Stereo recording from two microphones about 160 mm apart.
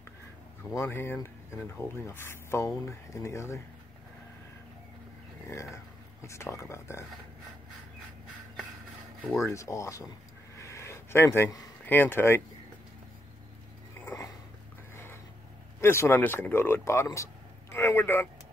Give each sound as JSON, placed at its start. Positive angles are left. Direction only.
{"t": 0.7, "sound": "speech", "side_deg": 15}
{"t": 6.2, "sound": "speech", "side_deg": 15}
{"t": 9.4, "sound": "speech", "side_deg": 20}
{"t": 10.6, "sound": "a sound", "side_deg": 20}
{"t": 15.8, "sound": "speech", "side_deg": 15}